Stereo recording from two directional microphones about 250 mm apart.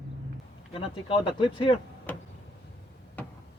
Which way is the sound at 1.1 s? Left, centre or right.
Centre.